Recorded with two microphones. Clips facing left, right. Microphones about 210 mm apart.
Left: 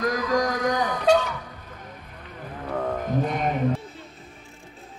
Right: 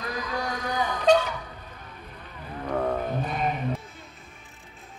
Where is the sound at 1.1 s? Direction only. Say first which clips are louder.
Even; 10° left (ahead or behind).